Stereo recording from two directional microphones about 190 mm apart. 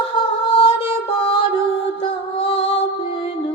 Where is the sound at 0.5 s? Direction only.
30° left (ahead or behind).